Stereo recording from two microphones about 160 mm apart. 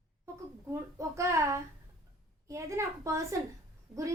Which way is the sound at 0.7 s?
20° right (ahead or behind).